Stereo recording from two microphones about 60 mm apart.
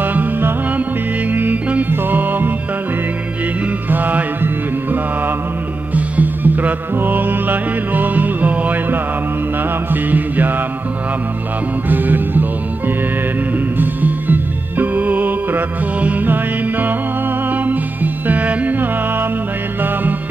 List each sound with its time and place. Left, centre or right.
0.0 s music: right
3.9 s music: right
5.9 s music: right
10.1 s mantra: right
11.9 s music: right
13.7 s music: right